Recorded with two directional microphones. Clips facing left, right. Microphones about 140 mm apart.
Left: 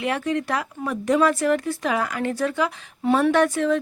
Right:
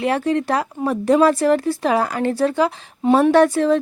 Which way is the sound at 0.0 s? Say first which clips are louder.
Right 5 dB; 35° right (ahead or behind).